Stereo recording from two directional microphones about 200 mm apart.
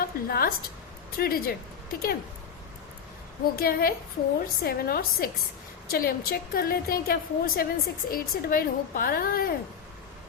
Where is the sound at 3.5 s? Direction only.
50° left (ahead or behind).